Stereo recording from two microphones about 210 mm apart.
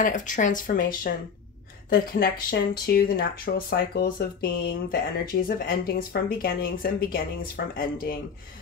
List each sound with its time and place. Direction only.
0.0 s speech: 40° left (ahead or behind)